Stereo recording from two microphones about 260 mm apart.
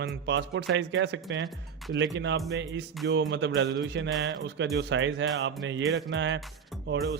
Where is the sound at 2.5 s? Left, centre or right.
Right.